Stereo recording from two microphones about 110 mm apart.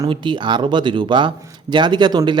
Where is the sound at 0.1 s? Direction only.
45° right (ahead or behind).